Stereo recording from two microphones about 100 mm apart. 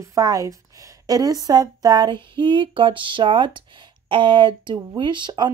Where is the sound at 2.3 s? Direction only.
55° right (ahead or behind).